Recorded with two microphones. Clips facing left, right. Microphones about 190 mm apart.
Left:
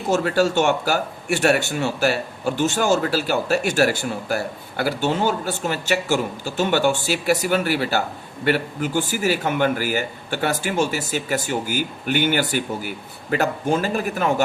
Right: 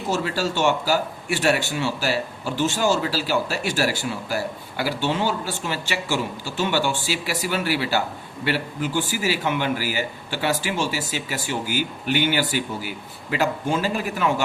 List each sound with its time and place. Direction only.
0.1 s speech: 55° left (ahead or behind)